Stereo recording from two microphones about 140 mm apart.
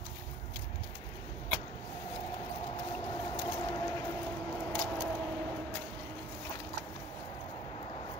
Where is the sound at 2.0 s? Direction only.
35° left (ahead or behind); by 4.7 s 15° left (ahead or behind).